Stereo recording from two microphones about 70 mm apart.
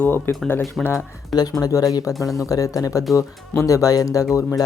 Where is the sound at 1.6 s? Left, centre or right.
Left.